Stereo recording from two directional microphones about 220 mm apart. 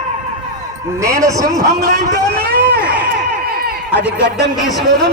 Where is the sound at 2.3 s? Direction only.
45° right (ahead or behind).